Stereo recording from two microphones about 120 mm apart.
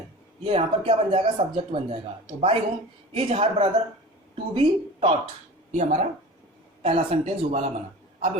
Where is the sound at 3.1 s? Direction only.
50° right (ahead or behind).